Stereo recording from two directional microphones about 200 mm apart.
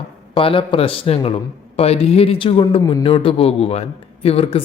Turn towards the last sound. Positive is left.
turn(degrees=30)  # may be behind; listen again after turning